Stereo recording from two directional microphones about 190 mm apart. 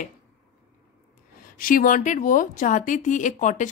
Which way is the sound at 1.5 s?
45° left (ahead or behind).